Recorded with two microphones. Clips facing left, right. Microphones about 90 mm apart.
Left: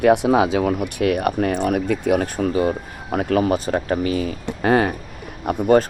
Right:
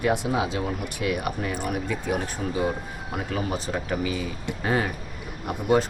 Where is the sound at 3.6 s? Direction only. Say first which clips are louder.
Left 7 dB; 50° left (ahead or behind).